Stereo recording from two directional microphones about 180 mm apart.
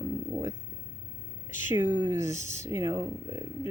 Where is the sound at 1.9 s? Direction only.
20° right (ahead or behind).